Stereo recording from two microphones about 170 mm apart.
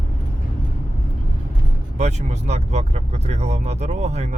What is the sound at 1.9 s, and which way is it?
Speech, 40° right (ahead or behind).